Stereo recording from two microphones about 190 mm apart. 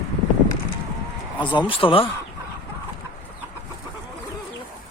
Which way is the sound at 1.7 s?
30° left (ahead or behind).